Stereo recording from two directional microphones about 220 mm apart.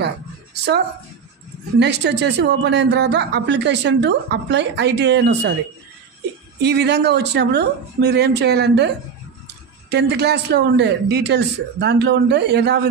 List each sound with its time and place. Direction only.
1.8 s speech: 50° right (ahead or behind)
6.6 s speech: 50° right (ahead or behind)